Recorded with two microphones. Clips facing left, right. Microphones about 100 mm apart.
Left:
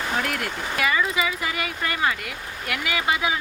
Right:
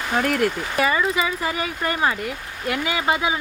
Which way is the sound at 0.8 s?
30° right (ahead or behind).